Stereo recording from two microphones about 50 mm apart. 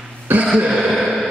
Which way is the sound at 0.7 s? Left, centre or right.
Centre.